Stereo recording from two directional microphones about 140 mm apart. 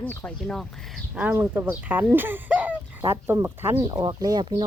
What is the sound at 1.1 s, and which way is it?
Speech, 15° right (ahead or behind).